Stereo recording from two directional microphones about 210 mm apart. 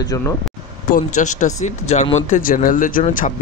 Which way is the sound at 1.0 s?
35° left (ahead or behind).